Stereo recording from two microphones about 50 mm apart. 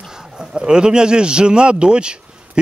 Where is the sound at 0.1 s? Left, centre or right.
Centre.